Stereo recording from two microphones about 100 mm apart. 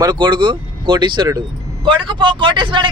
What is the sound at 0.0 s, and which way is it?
A man's voice, 50° right (ahead or behind).